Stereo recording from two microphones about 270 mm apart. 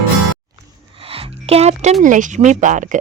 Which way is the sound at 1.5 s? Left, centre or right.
Right.